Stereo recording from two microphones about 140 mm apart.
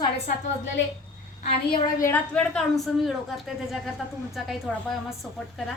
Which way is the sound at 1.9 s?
20° left (ahead or behind).